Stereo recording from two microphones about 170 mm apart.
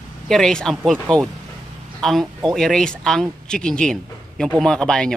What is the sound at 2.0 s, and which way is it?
Speech, centre (ahead or behind).